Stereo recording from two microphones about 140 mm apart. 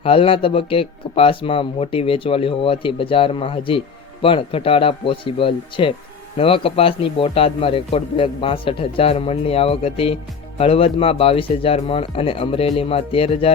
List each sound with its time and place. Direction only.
0.0 s speech: 40° left (ahead or behind)